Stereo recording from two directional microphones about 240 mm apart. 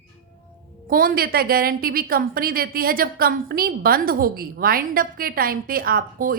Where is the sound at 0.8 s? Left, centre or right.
Right.